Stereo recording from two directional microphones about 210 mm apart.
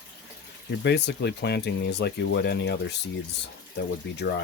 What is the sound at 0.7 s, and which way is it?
Speech, 55° left (ahead or behind).